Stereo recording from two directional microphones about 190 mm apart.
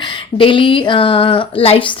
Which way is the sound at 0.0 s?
25° left (ahead or behind).